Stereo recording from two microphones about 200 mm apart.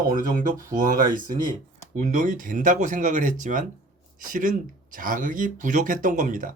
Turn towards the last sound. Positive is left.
turn(degrees=-40)  # may be behind; listen again after turning